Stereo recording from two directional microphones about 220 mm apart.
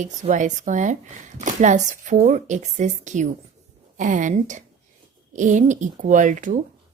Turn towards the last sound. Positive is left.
turn(degrees=-35)  # may be behind; listen again after turning